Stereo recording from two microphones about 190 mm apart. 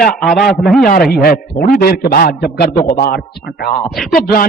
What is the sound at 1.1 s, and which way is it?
A man's voice, 55° left (ahead or behind).